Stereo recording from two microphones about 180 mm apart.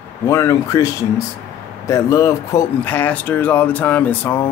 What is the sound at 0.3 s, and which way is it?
Speech, 15° left (ahead or behind).